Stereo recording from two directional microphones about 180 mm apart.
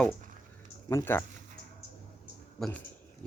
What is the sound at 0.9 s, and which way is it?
Speech, 15° left (ahead or behind).